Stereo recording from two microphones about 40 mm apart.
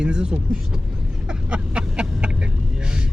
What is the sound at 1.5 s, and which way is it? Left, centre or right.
Vehicle, right.